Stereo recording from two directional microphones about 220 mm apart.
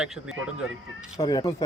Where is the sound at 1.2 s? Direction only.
15° left (ahead or behind).